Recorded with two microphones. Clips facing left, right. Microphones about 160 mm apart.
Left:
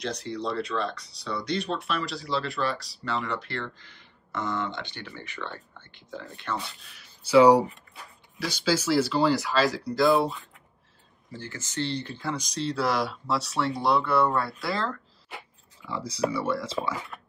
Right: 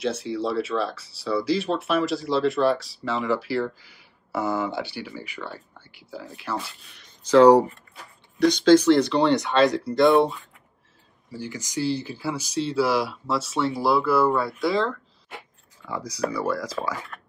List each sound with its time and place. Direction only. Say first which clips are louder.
0.0 s speech: right 5 dB; 5° right (ahead or behind)
11.3 s speech: right 3 dB; 15° right (ahead or behind)
16.0 s speech: right 1 dB; 30° left (ahead or behind)
17.1 s a sound: right 1 dB; 5° left (ahead or behind)